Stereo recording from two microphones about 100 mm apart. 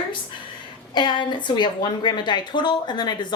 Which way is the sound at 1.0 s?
50° left (ahead or behind).